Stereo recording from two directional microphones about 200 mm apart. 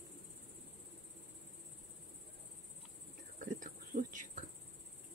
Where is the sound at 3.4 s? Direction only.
40° right (ahead or behind).